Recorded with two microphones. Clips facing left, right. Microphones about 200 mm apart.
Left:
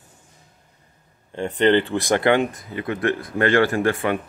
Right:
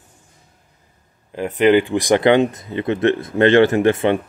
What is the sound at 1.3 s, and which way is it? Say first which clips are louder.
Speech: right 4 dB; 5° right (ahead or behind).